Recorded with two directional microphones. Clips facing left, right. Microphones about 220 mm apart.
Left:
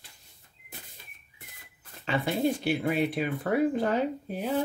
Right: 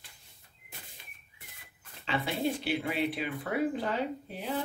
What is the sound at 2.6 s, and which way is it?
Speech, 45° left (ahead or behind).